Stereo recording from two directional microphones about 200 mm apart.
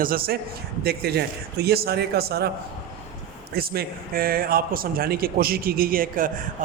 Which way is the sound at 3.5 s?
50° right (ahead or behind).